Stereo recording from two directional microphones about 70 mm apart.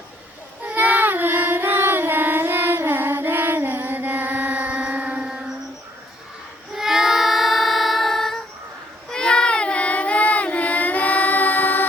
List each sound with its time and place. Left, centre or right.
0.6 s child singing: right
6.7 s child singing: centre; by 11.9 s left